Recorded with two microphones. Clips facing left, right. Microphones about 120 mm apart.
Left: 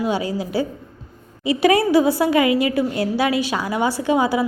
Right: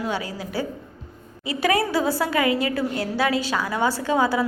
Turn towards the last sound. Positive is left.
turn(degrees=15)  # may be behind; listen again after turning